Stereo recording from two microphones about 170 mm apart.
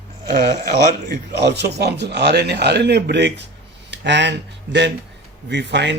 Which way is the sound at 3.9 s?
90° right.